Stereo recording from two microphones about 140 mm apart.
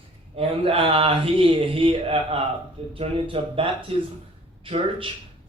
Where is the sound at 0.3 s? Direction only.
40° right (ahead or behind).